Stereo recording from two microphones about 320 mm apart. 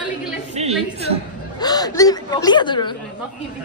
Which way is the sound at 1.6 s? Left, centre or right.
Centre.